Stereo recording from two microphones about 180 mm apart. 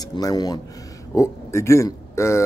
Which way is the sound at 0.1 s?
20° left (ahead or behind).